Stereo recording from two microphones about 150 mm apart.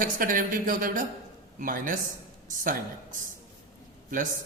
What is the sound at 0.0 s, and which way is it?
A man's voice, 70° right (ahead or behind).